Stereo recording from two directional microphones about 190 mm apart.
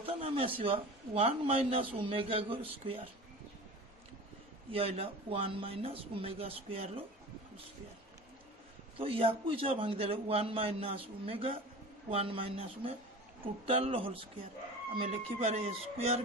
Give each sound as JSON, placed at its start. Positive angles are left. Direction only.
{"t": 0.0, "sound": "a sound", "side_deg": -30}
{"t": 0.6, "sound": "a man's voice", "side_deg": -30}
{"t": 4.6, "sound": "speech", "side_deg": -30}
{"t": 8.9, "sound": "a man's voice", "side_deg": -30}